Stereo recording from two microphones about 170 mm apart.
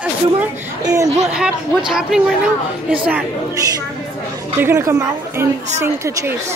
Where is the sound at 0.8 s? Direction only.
20° right (ahead or behind).